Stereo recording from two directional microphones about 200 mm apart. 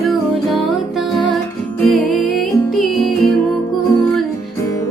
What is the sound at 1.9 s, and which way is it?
Music, centre (ahead or behind).